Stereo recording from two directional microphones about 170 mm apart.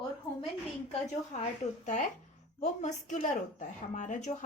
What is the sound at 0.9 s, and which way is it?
Speech, 40° left (ahead or behind).